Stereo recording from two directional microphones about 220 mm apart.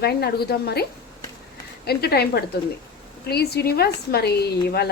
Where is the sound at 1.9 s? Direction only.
45° left (ahead or behind).